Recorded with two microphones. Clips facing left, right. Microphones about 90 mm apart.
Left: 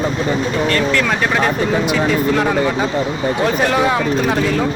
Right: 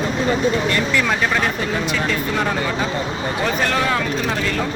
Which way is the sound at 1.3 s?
15° left (ahead or behind).